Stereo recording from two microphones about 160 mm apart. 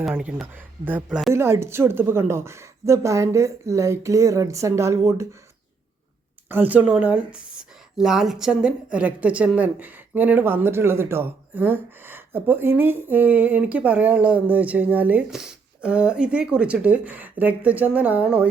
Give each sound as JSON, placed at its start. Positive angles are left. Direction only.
{"t": 0.0, "sound": "a woman's voice", "side_deg": -5}
{"t": 6.5, "sound": "a woman's voice", "side_deg": -10}